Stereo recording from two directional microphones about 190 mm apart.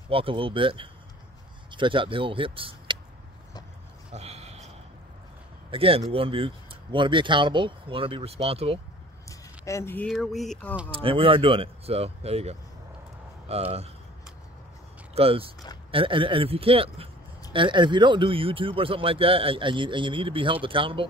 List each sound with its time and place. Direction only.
0.1 s speech: 30° right (ahead or behind)
4.1 s a sound: 35° right (ahead or behind)
5.7 s speech: 30° right (ahead or behind)
9.3 s speech: 15° left (ahead or behind)
10.9 s speech: 30° right (ahead or behind)
15.1 s speech: 30° right (ahead or behind)